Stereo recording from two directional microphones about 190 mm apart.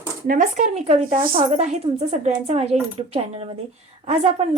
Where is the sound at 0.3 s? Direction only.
45° right (ahead or behind).